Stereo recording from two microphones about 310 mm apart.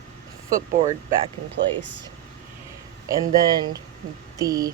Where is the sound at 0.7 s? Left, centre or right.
Right.